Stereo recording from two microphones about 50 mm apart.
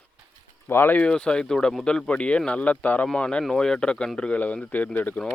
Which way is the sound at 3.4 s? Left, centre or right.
Centre.